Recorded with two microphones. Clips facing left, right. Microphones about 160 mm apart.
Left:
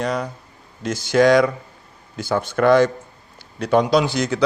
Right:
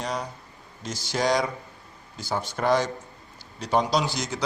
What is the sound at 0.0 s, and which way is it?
A man's voice, 60° left (ahead or behind).